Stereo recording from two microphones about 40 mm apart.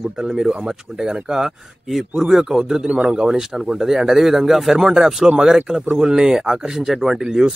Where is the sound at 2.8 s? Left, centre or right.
Right.